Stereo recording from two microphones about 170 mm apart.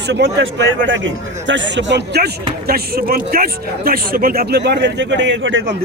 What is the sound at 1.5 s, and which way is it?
Speech, 90° right.